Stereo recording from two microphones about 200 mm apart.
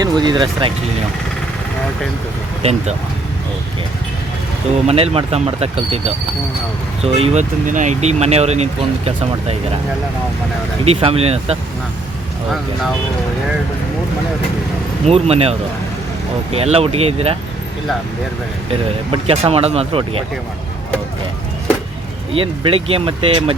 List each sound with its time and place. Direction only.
0.0 s speech: 20° right (ahead or behind)
2.6 s speech: 30° right (ahead or behind)
4.9 s speech: 30° right (ahead or behind)
10.8 s speech: 30° right (ahead or behind)
15.0 s speech: 30° right (ahead or behind)
18.7 s speech: 30° right (ahead or behind)
22.3 s speech: 25° right (ahead or behind)